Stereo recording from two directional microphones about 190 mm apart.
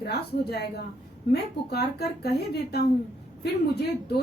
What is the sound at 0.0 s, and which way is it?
Speech, 60° left (ahead or behind).